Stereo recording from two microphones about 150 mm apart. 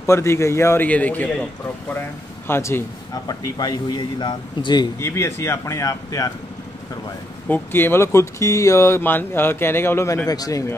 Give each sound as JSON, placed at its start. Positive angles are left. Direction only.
{"t": 0.0, "sound": "speech", "side_deg": 20}
{"t": 2.4, "sound": "speech", "side_deg": 15}
{"t": 3.3, "sound": "a man's voice", "side_deg": 25}
{"t": 4.9, "sound": "a man's voice", "side_deg": 20}
{"t": 7.4, "sound": "speech", "side_deg": 15}